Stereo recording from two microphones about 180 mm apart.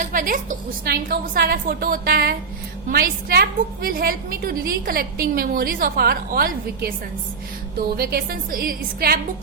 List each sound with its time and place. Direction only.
0.0 s a woman's voice: 50° right (ahead or behind)
7.9 s a woman's voice: 60° right (ahead or behind)